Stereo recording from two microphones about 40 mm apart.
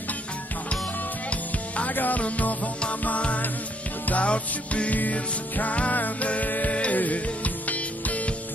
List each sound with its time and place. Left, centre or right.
1.3 s music: left
2.0 s music: left
4.9 s music: left
6.7 s music: left